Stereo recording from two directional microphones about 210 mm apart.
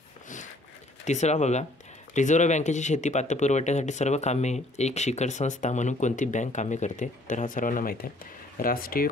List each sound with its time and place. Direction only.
1.0 s speech: 35° left (ahead or behind)